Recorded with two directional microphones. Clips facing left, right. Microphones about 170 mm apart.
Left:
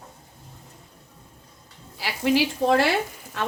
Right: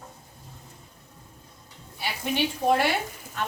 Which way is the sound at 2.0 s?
90° left.